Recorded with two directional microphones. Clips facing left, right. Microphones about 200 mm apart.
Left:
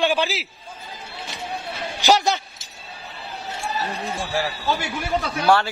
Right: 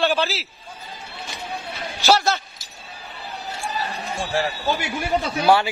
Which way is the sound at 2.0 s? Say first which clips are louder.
Even; 15° left (ahead or behind).